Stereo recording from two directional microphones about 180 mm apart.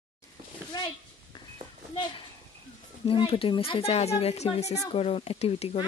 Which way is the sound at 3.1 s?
30° left (ahead or behind).